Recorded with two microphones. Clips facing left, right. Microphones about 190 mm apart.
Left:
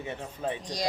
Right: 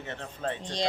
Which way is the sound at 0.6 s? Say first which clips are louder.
Right 1 dB; 25° right (ahead or behind).